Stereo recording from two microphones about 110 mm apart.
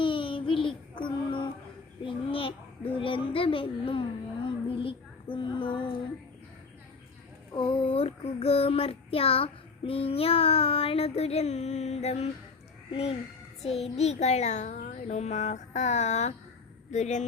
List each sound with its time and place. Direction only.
0.0 s child singing: 50° left (ahead or behind)
2.0 s a sound: 55° left (ahead or behind)
4.4 s child singing: 55° left (ahead or behind)
7.5 s child singing: 50° left (ahead or behind); by 12.3 s 80° left
12.9 s a sound: 60° left (ahead or behind)
13.6 s child singing: 70° left (ahead or behind); by 16.3 s 90° left
16.9 s speech: 90° left